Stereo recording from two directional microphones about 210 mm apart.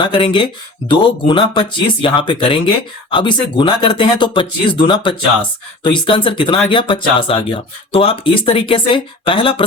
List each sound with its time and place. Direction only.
0.0 s speech: 25° left (ahead or behind)